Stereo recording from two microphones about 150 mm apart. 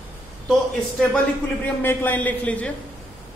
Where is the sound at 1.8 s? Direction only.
15° left (ahead or behind).